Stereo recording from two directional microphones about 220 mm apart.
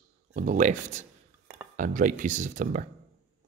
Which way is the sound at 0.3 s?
35° right (ahead or behind).